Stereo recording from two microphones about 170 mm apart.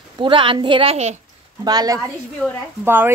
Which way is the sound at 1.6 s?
25° right (ahead or behind).